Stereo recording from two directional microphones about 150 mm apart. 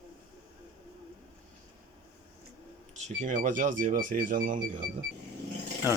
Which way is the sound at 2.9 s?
55° right (ahead or behind).